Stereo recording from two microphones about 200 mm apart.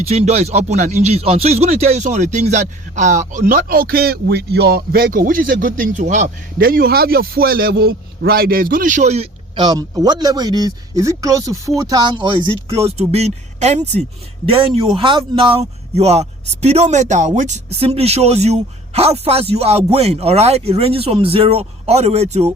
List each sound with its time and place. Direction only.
0.1 s speech: 30° right (ahead or behind)
9.6 s speech: 20° right (ahead or behind)